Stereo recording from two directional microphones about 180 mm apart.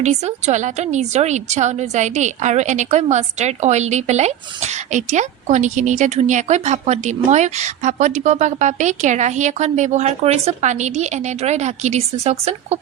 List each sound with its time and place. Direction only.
0.0 s a woman's voice: 40° right (ahead or behind)